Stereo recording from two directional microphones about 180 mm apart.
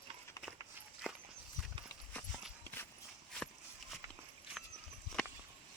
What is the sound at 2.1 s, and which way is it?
Clip-clop, 10° left (ahead or behind).